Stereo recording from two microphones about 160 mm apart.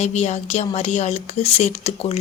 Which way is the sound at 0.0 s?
45° left (ahead or behind).